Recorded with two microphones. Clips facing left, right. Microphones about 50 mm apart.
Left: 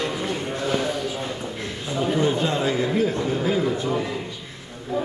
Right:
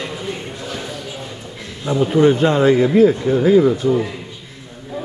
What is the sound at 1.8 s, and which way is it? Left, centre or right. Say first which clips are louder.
Speech: right 8 dB; right.